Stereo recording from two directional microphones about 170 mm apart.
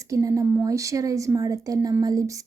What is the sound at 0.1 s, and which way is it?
A woman's voice, 20° right (ahead or behind).